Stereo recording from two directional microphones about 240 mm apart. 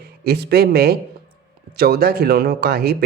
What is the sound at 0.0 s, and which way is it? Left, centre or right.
Speech, right.